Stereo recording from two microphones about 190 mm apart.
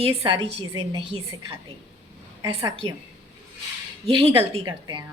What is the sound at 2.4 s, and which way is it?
Speech, 20° right (ahead or behind).